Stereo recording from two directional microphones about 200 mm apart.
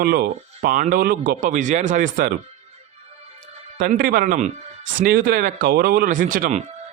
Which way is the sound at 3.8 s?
45° right (ahead or behind).